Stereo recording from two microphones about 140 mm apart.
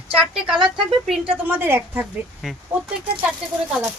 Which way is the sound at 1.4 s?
15° right (ahead or behind).